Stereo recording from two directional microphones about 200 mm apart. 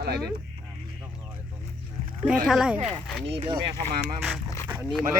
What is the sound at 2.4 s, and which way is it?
Speech, 5° right (ahead or behind).